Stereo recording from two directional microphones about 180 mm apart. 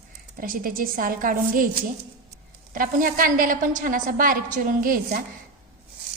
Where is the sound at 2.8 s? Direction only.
50° right (ahead or behind).